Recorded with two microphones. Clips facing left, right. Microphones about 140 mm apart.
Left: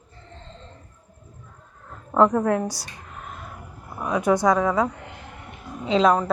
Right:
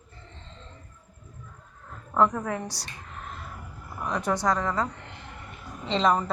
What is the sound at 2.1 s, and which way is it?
Speech, 40° left (ahead or behind).